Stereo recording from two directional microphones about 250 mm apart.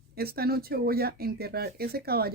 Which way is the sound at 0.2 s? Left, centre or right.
Right.